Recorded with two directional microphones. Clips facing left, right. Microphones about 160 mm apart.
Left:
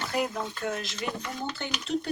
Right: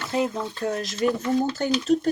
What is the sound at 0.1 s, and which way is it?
Speech, 25° right (ahead or behind).